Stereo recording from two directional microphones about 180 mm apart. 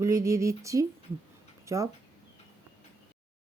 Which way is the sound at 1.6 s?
15° right (ahead or behind).